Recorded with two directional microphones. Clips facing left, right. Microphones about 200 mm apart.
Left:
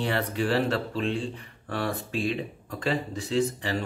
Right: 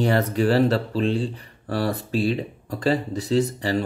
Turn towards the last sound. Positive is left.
turn(degrees=-40)  # may be behind; listen again after turning